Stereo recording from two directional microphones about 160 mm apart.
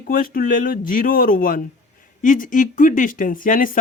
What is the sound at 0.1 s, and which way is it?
Speech, 60° left (ahead or behind).